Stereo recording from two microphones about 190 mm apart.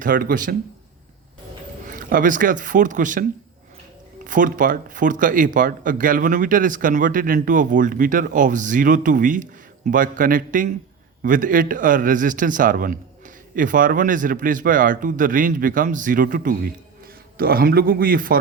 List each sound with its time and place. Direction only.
0.0 s speech: 45° right (ahead or behind)
1.9 s speech: 45° right (ahead or behind)